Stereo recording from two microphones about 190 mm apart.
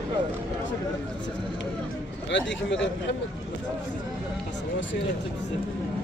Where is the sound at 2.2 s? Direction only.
70° left (ahead or behind).